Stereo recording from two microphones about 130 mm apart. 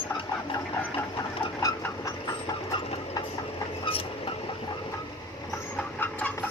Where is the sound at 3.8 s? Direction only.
45° left (ahead or behind).